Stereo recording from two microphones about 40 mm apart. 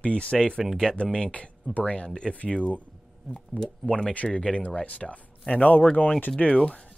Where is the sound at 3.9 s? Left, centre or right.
Left.